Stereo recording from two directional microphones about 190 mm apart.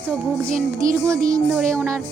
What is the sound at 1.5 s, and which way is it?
Speech, 5° left (ahead or behind).